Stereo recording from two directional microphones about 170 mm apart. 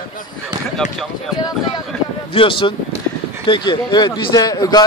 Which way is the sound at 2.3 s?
30° left (ahead or behind).